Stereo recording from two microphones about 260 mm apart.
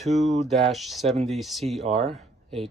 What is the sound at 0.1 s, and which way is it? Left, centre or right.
Speech, right.